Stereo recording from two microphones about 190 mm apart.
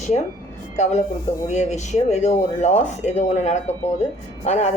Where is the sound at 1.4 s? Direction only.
35° left (ahead or behind).